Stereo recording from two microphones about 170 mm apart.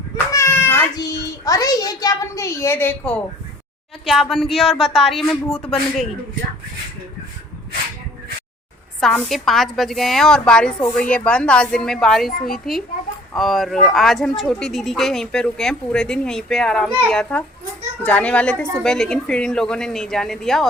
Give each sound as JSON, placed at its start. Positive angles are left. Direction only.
{"t": 0.3, "sound": "a child's voice", "side_deg": 15}
{"t": 9.0, "sound": "a child's voice", "side_deg": 0}